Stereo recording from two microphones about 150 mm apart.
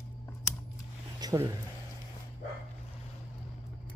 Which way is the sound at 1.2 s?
20° right (ahead or behind).